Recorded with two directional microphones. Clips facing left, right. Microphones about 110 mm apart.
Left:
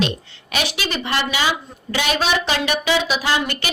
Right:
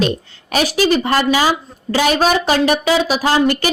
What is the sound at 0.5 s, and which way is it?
A woman's voice, 40° right (ahead or behind).